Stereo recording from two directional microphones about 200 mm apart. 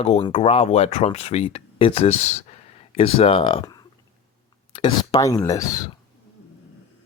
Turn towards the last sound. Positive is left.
turn(degrees=15)  # may be behind; listen again after turning